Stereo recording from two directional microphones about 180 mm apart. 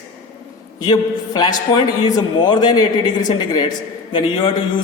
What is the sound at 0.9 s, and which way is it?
A man's voice, 20° left (ahead or behind).